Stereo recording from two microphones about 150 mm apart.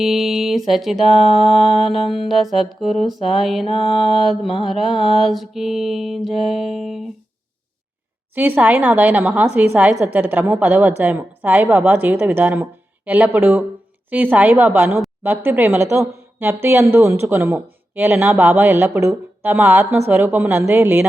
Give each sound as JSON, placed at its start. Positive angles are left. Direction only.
{"t": 0.0, "sound": "music", "side_deg": 0}
{"t": 8.4, "sound": "speech", "side_deg": -10}